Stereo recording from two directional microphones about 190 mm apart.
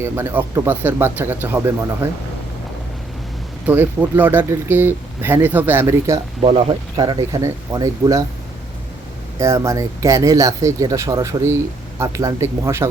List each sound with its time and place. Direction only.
0.0 s speech: 15° right (ahead or behind)
3.7 s speech: 10° right (ahead or behind)
6.4 s speech: 25° right (ahead or behind)
9.4 s speech: 15° right (ahead or behind)